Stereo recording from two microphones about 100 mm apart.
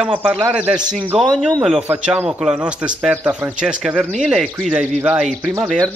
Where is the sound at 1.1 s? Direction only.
90° right.